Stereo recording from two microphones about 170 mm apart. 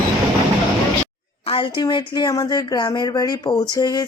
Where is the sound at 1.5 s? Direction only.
30° left (ahead or behind).